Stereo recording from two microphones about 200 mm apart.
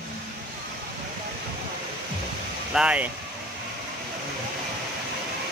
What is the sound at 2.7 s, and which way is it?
Speech, 5° right (ahead or behind).